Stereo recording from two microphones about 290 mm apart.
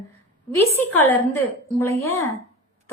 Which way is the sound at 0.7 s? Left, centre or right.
Left.